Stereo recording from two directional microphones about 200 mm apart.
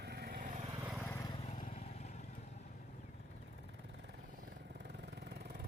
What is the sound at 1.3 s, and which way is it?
Vehicle, 35° left (ahead or behind).